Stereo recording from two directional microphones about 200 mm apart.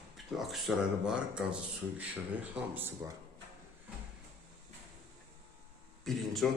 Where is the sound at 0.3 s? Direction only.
Centre (ahead or behind).